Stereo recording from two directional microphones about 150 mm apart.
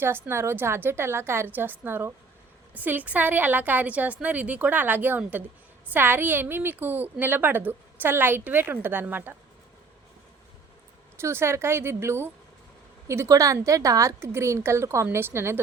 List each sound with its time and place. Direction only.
0.0 s a woman's voice: 15° right (ahead or behind)
11.2 s a woman's voice: 15° right (ahead or behind)